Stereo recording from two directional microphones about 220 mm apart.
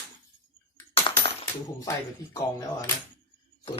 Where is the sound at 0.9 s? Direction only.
25° left (ahead or behind).